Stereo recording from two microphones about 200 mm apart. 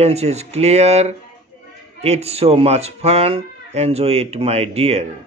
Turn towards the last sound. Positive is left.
turn(degrees=-30)  # may be behind; listen again after turning